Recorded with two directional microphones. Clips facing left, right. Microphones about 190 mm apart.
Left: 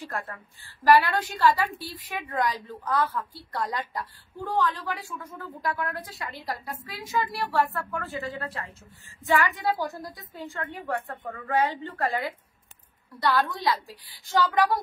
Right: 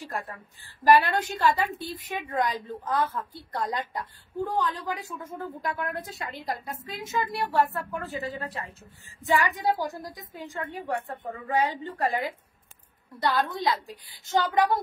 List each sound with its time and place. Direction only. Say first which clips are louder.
0.1 s a woman's voice: even; 15° right (ahead or behind)
5.6 s a woman's voice: left 3 dB; 25° right (ahead or behind)